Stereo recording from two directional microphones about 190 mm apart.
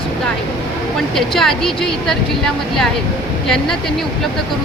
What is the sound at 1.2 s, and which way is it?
A woman's voice, centre (ahead or behind).